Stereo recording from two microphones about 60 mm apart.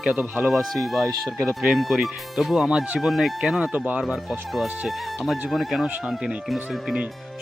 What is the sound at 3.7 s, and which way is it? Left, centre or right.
Speech, right.